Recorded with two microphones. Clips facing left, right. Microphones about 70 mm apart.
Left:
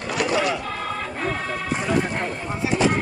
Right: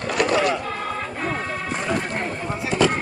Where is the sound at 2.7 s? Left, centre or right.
Right.